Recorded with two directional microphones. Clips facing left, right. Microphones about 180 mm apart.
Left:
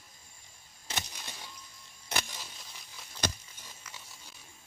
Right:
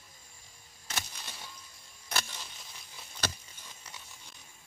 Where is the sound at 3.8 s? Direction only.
35° right (ahead or behind).